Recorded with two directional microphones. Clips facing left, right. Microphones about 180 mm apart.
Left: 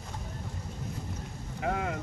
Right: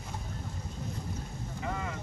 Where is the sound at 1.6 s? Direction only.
65° left (ahead or behind).